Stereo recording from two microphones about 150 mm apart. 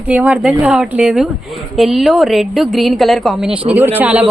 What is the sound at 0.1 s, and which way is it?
Speech, 10° right (ahead or behind).